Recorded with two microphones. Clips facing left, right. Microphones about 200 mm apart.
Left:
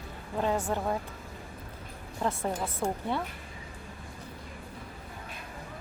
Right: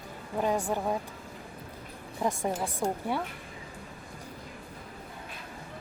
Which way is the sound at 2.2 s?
15° right (ahead or behind).